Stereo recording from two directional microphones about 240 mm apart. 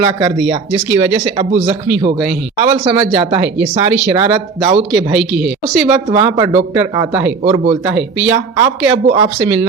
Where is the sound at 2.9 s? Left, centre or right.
Right.